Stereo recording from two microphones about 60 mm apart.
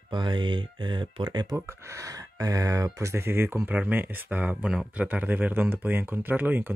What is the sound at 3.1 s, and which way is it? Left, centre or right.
Speech, right.